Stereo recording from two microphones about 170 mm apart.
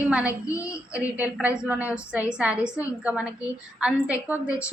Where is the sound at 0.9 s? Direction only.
10° right (ahead or behind).